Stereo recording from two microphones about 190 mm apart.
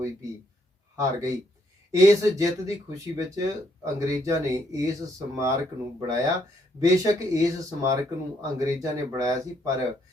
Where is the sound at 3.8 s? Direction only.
15° right (ahead or behind).